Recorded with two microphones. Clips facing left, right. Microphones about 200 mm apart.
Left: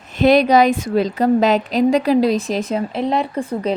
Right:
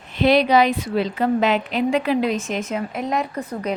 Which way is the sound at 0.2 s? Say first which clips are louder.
Left 3 dB; 45° left (ahead or behind).